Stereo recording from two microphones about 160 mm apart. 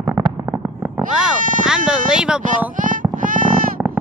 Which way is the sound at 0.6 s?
15° right (ahead or behind).